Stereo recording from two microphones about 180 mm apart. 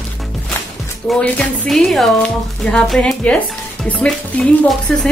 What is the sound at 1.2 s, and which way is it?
Speech, centre (ahead or behind).